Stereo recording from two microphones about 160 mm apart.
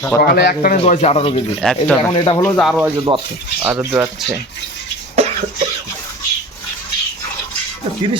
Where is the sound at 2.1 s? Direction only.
30° left (ahead or behind).